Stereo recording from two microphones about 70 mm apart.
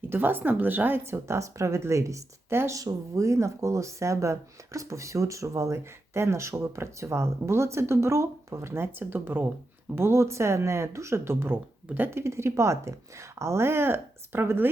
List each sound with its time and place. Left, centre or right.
0.1 s speech: right
2.5 s speech: right
2.7 s speech: right
12.2 s speech: right